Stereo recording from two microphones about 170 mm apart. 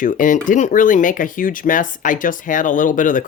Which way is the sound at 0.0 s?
50° left (ahead or behind).